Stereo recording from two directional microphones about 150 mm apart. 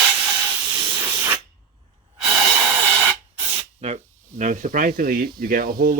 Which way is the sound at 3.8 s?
45° right (ahead or behind).